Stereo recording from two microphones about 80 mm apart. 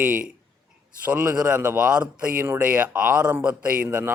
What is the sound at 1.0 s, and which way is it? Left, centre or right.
A man's voice, centre.